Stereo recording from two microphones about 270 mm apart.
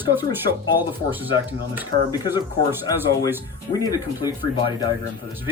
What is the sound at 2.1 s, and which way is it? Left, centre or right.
Speech, centre.